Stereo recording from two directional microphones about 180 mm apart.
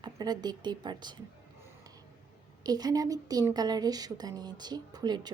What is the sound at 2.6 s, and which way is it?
Speech, 20° right (ahead or behind).